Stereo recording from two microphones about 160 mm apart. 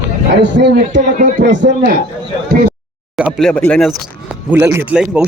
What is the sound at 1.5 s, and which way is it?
Speech, 90° right.